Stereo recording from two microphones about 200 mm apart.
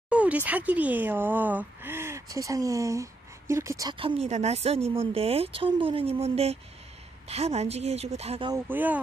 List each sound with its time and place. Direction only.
0.1 s a woman's voice: 5° right (ahead or behind); by 8.5 s 30° right (ahead or behind)
8.6 s speech: 10° right (ahead or behind)